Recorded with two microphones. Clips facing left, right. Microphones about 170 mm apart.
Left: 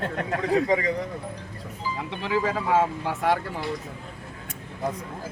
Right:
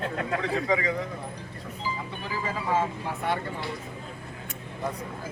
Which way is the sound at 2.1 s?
90° left.